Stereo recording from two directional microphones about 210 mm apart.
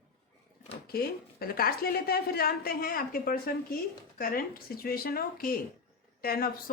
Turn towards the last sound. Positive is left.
turn(degrees=45)  # may be behind; listen again after turning